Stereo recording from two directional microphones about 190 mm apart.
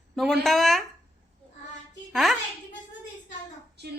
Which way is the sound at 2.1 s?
Centre (ahead or behind).